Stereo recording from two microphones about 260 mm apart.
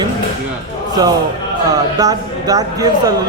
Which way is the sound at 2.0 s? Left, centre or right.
Centre.